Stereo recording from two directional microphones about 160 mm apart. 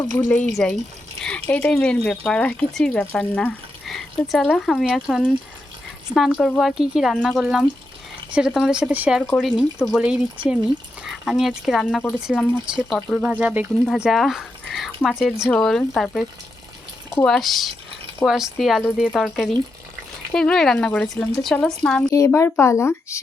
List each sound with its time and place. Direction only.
0.0 s speech: 10° left (ahead or behind)
12.7 s speech: 5° right (ahead or behind)
13.8 s a sound: centre (ahead or behind)
15.0 s speech: centre (ahead or behind)
17.2 s speech: centre (ahead or behind); by 23.2 s 15° left (ahead or behind)